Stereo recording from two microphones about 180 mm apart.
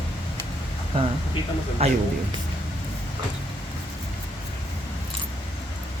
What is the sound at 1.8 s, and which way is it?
Speech, 35° right (ahead or behind).